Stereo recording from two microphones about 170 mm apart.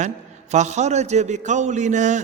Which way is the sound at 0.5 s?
40° right (ahead or behind).